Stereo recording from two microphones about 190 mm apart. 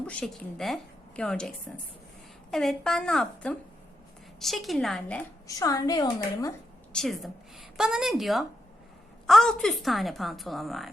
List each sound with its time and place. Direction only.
0.1 s a woman's voice: 5° left (ahead or behind)
5.5 s a woman's voice: 20° left (ahead or behind)
6.9 s a woman's voice: centre (ahead or behind)